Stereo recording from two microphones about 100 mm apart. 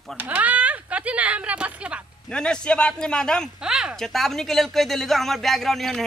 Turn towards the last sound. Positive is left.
turn(degrees=5)  # may be behind; listen again after turning